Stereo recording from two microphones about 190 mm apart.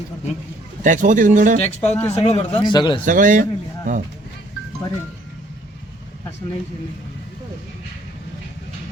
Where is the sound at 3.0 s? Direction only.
45° right (ahead or behind).